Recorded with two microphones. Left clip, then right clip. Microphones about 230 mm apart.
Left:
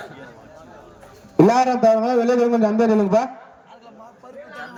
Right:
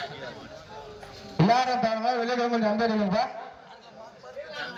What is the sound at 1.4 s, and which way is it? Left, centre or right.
A man's voice, left.